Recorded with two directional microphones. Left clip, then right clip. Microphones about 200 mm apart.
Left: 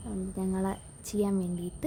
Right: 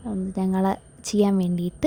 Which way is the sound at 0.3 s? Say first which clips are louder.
Right 9 dB; 40° right (ahead or behind).